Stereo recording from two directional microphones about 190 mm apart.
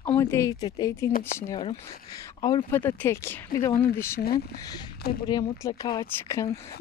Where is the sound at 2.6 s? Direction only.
10° left (ahead or behind).